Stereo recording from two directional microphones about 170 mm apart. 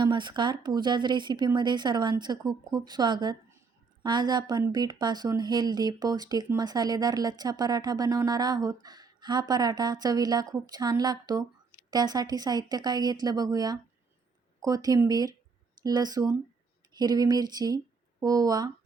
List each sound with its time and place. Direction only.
0.0 s speech: 25° right (ahead or behind)